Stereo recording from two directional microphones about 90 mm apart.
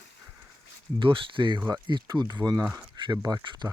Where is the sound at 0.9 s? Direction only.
75° right (ahead or behind).